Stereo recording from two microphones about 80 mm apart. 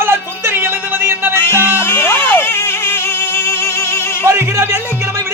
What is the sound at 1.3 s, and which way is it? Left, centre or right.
Music, left.